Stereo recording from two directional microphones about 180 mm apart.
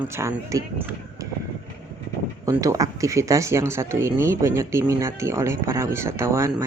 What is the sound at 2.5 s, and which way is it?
Speech, 20° right (ahead or behind).